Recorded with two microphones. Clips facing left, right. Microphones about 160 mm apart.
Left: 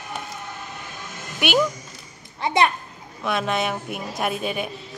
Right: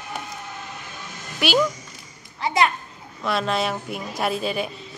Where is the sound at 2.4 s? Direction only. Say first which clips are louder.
Left 1 dB; 25° left (ahead or behind).